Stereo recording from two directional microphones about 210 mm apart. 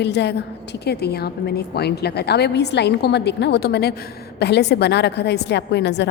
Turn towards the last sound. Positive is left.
turn(degrees=55)  # may be behind; listen again after turning